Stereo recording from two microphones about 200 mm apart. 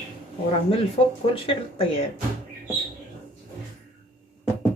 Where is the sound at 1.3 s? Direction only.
25° left (ahead or behind).